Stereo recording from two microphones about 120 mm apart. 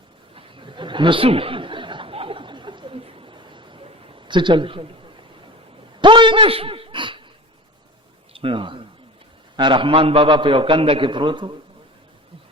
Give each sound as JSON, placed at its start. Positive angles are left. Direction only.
{"t": 0.3, "sound": "snicker", "side_deg": -45}
{"t": 6.0, "sound": "a sound", "side_deg": -40}
{"t": 8.3, "sound": "a man's voice", "side_deg": -50}